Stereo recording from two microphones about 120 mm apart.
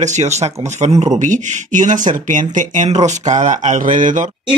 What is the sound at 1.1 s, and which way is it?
Speech, 90° right.